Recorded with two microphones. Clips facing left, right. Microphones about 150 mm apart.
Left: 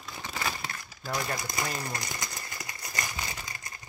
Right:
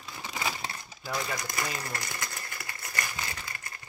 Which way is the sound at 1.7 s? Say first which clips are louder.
Left 1 dB; 15° left (ahead or behind).